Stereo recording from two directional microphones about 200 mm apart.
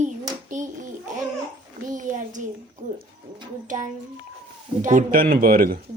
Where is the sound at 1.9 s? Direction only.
40° right (ahead or behind).